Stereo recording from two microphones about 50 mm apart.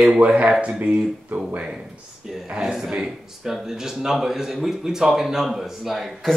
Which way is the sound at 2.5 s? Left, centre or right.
Centre.